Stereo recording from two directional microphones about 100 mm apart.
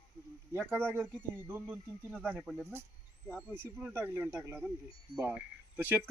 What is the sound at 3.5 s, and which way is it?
Speech, 15° right (ahead or behind).